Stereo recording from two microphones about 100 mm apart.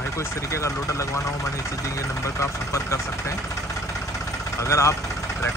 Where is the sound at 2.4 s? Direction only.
30° left (ahead or behind).